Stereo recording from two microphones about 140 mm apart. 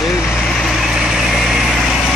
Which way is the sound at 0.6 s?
Centre (ahead or behind).